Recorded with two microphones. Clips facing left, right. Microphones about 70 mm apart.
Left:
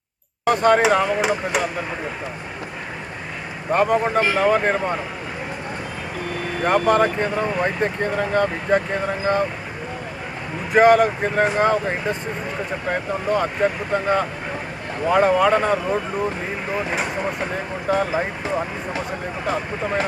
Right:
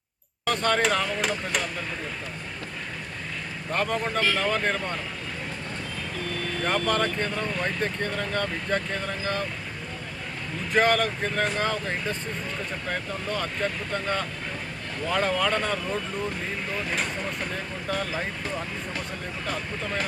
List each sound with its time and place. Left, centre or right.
0.4 s speech: centre
3.7 s speech: centre
6.2 s speech: centre
10.7 s speech: centre